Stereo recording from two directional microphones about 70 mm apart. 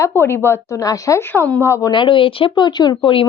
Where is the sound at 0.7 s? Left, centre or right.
Left.